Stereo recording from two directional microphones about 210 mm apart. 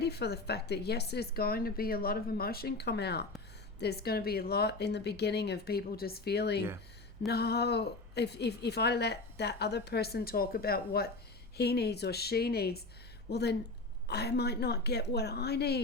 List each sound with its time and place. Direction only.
0.0 s a woman's voice: 50° left (ahead or behind)